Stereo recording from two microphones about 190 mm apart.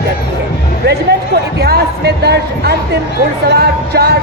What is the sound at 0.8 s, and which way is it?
A woman's voice, 60° right (ahead or behind).